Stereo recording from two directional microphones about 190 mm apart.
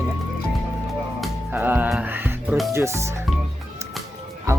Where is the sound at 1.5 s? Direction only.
10° right (ahead or behind).